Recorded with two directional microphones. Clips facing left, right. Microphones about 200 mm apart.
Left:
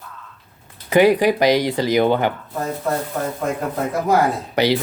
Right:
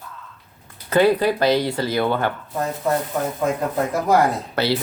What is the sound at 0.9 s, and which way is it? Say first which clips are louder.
Speech: left 3 dB; 15° left (ahead or behind).